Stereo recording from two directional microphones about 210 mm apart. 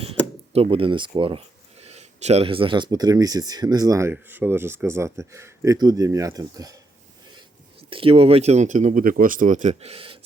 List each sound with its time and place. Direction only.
0.0 s speech: 30° right (ahead or behind)
7.9 s speech: 25° right (ahead or behind)